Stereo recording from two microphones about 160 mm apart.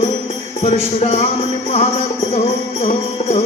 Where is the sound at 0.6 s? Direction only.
40° left (ahead or behind).